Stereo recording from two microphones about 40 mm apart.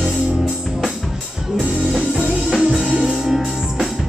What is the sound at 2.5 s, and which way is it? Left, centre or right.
Music, right.